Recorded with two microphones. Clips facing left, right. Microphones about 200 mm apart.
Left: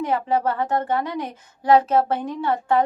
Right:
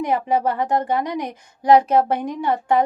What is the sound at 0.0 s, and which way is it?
A woman's voice, 15° right (ahead or behind).